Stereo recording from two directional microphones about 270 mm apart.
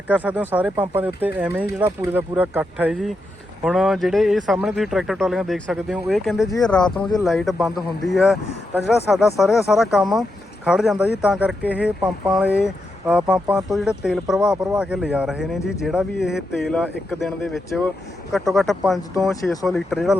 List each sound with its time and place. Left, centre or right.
0.1 s speech: centre
12.5 s speech: centre
13.1 s speech: centre